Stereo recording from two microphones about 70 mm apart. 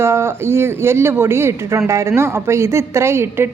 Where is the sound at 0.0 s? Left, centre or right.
Right.